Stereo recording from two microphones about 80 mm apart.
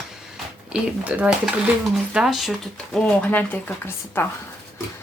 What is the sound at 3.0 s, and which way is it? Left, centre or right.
Speech, centre.